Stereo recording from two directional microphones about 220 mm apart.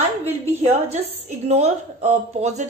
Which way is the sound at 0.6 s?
30° right (ahead or behind).